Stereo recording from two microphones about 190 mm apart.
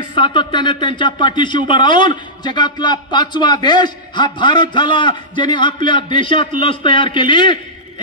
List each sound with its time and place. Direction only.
0.1 s speech: 25° left (ahead or behind)